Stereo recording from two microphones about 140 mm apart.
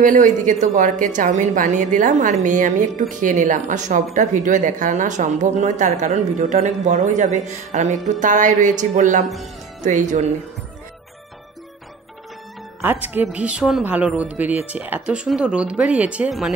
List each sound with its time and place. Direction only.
0.0 s a woman's voice: 70° right (ahead or behind)
12.8 s speech: 15° right (ahead or behind)